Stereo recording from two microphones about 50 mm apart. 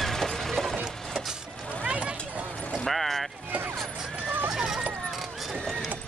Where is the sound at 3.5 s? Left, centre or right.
Right.